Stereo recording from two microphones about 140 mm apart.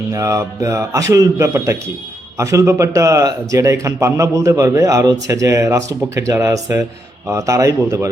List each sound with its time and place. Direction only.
0.1 s speech: 20° right (ahead or behind)